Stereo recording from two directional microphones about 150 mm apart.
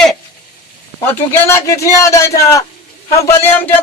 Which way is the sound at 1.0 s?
15° left (ahead or behind).